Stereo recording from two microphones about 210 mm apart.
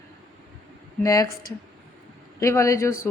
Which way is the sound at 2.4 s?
15° left (ahead or behind).